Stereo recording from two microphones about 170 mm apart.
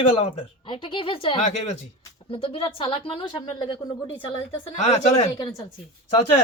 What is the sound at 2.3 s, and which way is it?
A woman's voice, 30° left (ahead or behind).